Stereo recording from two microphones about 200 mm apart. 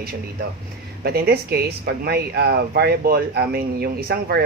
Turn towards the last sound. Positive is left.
turn(degrees=-50)  # may be behind; listen again after turning